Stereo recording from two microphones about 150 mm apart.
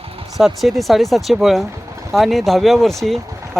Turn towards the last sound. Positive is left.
turn(degrees=0)  # may be behind; listen again after turning